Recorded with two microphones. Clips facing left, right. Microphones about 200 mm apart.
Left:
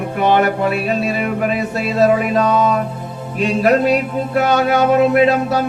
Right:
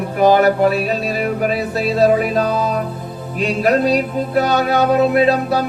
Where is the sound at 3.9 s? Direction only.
35° right (ahead or behind).